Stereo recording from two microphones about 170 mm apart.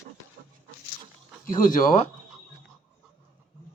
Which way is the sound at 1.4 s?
55° left (ahead or behind).